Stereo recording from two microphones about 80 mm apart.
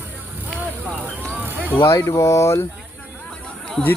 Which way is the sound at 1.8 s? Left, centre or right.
Left.